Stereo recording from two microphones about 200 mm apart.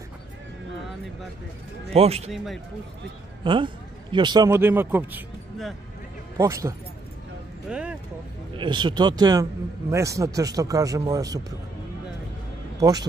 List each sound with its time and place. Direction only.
2.0 s speech: 30° right (ahead or behind)
2.3 s a man's voice: centre (ahead or behind)
3.4 s a man's voice: 25° right (ahead or behind)
6.3 s a man's voice: 15° right (ahead or behind)
7.7 s speech: 5° right (ahead or behind)
8.5 s a man's voice: 25° right (ahead or behind)